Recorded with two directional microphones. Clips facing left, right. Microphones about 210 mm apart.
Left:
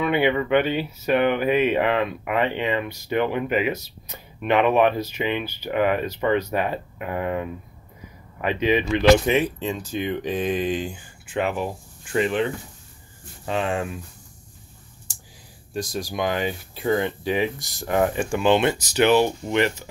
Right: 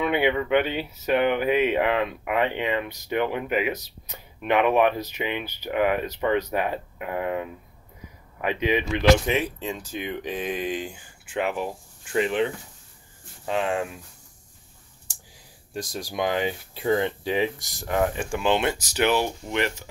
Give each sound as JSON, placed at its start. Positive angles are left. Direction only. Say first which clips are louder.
{"t": 0.0, "sound": "speech", "louder": "left 2 dB", "side_deg": -15}
{"t": 9.2, "sound": "speech", "louder": "left 4 dB", "side_deg": 0}
{"t": 12.2, "sound": "speech", "louder": "left 1 dB", "side_deg": -15}
{"t": 13.5, "sound": "speech", "louder": "left 1 dB", "side_deg": -10}
{"t": 15.7, "sound": "speech", "louder": "left 4 dB", "side_deg": -25}
{"t": 17.8, "sound": "speech", "louder": "left 3 dB", "side_deg": 5}